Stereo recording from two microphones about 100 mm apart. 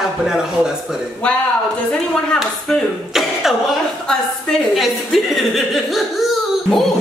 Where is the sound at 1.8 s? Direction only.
10° left (ahead or behind).